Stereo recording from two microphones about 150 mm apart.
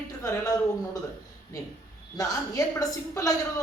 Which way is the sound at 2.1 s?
25° left (ahead or behind).